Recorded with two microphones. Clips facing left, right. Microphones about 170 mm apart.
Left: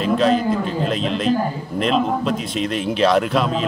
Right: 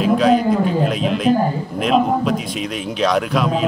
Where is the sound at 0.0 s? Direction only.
5° right (ahead or behind).